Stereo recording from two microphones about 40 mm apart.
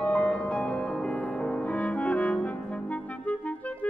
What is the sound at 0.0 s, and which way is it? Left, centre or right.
Music, left.